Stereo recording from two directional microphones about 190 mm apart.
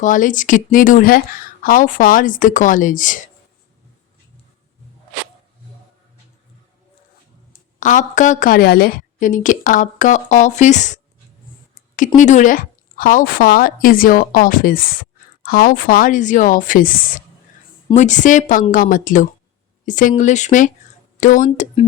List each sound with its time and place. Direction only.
0.0 s a woman's voice: 45° left (ahead or behind)
7.8 s a woman's voice: 40° left (ahead or behind)